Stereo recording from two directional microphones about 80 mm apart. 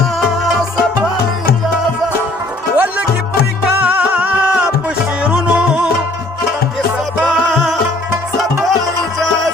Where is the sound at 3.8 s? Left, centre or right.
Centre.